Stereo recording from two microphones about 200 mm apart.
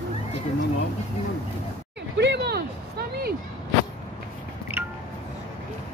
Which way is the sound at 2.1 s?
60° right (ahead or behind).